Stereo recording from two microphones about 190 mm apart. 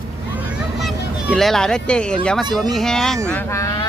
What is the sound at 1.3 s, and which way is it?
Speech, centre (ahead or behind).